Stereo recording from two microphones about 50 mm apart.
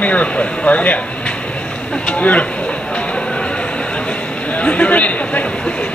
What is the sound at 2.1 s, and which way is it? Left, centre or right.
Speech, left.